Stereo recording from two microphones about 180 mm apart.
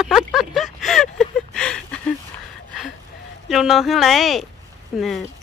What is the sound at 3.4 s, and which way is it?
Speech, centre (ahead or behind).